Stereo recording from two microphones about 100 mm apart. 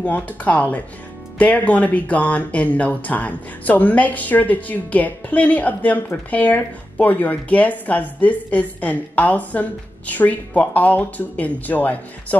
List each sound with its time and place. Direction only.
0.0 s speech: 15° left (ahead or behind)